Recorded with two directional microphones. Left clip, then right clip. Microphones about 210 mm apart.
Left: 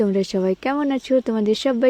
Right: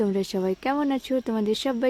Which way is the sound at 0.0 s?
15° left (ahead or behind).